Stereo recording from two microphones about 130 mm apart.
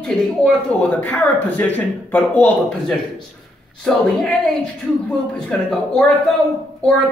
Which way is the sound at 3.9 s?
5° left (ahead or behind).